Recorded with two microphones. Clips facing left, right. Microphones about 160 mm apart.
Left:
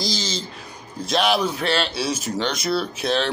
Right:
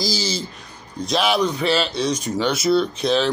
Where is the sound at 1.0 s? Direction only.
Centre (ahead or behind).